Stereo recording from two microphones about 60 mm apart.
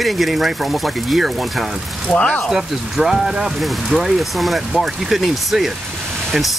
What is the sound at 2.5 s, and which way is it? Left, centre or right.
Speech, centre.